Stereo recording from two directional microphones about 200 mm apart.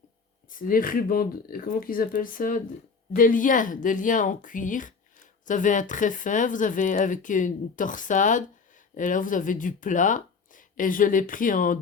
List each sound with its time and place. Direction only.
0.5 s a woman's voice: 45° left (ahead or behind)